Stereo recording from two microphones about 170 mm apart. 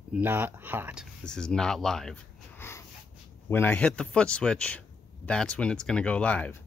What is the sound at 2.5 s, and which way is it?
Wheeze, 15° left (ahead or behind).